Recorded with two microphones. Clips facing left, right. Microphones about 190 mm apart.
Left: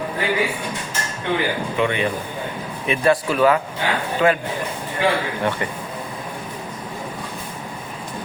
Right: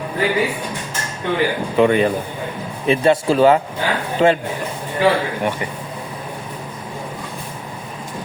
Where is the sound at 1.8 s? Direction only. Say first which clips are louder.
Right 8 dB; 40° right (ahead or behind).